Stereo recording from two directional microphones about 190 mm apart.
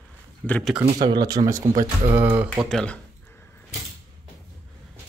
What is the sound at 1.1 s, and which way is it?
Speech, 20° right (ahead or behind).